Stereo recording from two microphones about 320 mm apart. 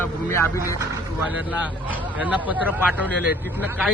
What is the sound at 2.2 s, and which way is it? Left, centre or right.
Speech, centre.